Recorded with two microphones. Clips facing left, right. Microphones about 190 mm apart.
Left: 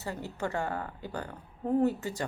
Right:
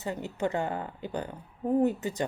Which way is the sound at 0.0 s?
20° right (ahead or behind).